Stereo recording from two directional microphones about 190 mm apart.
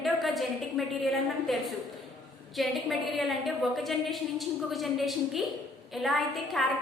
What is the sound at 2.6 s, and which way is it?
A woman's voice, centre (ahead or behind).